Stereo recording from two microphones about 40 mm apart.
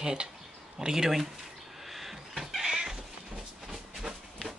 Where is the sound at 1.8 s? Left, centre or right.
Centre.